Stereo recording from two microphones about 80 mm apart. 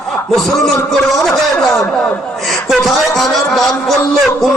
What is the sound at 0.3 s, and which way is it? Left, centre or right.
Speech, centre.